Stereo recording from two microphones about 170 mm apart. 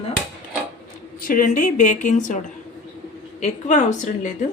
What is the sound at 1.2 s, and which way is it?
A woman's voice, 55° left (ahead or behind).